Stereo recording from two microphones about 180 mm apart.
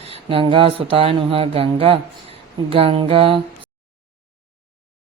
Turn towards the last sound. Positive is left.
turn(degrees=-30)  # may be behind; listen again after turning